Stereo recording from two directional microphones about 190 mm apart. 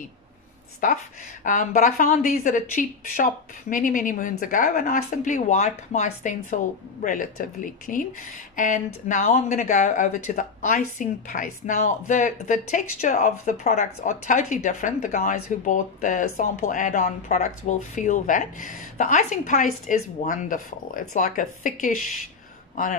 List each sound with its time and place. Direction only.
0.8 s speech: 45° left (ahead or behind)